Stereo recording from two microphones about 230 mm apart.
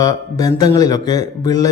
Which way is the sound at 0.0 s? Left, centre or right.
Centre.